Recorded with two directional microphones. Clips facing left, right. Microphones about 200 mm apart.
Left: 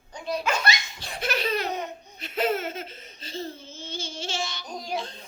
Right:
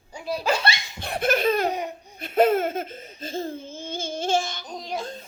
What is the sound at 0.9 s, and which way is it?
Laughter, 55° right (ahead or behind).